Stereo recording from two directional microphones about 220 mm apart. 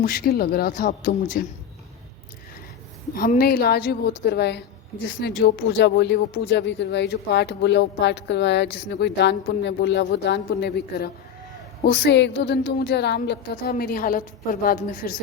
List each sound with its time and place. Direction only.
0.0 s speech: 45° left (ahead or behind)
3.2 s a woman's voice: 40° left (ahead or behind)